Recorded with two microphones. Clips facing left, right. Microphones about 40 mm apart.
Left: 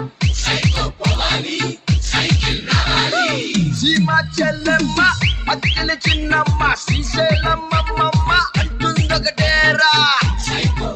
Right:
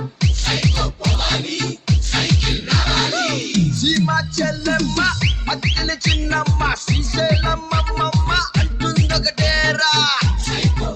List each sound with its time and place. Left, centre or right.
0.5 s music: left
4.8 s music: left
5.0 s music: left